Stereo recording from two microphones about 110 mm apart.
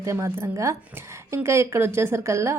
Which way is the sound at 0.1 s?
25° right (ahead or behind).